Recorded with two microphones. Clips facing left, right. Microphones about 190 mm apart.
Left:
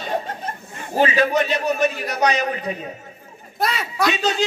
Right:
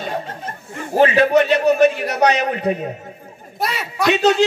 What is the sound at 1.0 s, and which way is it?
A man's voice, 60° right (ahead or behind).